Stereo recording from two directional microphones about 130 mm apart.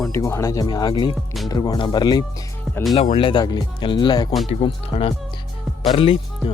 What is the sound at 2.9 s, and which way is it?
Speech, 50° left (ahead or behind).